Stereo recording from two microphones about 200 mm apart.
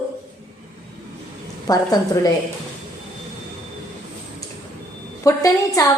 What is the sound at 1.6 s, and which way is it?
Speech, 20° left (ahead or behind).